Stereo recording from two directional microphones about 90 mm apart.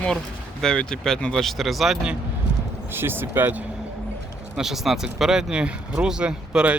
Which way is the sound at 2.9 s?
25° right (ahead or behind).